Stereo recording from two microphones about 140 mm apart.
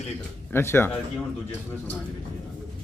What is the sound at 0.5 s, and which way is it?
Speech, 15° left (ahead or behind).